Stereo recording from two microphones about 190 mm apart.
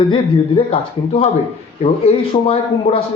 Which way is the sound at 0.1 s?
30° left (ahead or behind).